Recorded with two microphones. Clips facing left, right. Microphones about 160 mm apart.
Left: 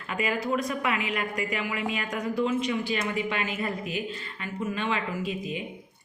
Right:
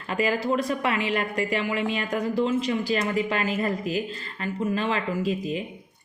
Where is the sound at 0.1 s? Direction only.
35° right (ahead or behind).